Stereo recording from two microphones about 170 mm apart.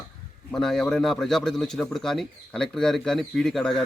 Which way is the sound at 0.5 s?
Centre (ahead or behind).